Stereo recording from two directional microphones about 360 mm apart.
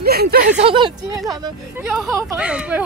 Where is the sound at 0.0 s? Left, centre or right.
Right.